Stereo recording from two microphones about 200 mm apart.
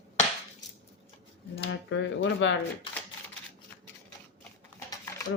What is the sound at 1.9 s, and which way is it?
Speech, 65° left (ahead or behind).